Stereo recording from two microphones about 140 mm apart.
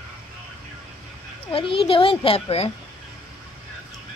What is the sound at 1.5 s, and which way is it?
A child's voice, 40° left (ahead or behind).